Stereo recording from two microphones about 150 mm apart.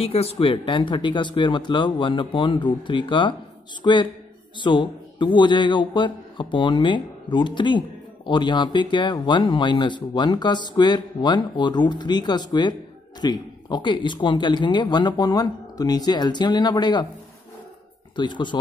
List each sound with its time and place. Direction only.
0.0 s speech: 40° left (ahead or behind)
18.1 s speech: 30° left (ahead or behind)